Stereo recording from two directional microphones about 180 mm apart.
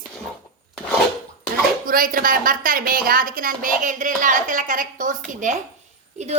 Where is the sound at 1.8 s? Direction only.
50° right (ahead or behind).